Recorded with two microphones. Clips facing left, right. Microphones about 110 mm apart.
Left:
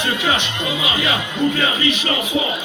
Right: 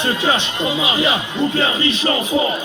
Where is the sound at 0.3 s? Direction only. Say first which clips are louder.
Right 2 dB; 30° right (ahead or behind).